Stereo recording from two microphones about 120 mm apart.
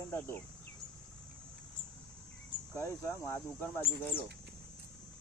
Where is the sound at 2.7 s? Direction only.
25° left (ahead or behind).